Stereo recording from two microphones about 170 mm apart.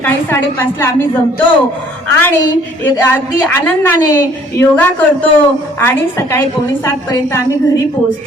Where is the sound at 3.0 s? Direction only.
10° left (ahead or behind).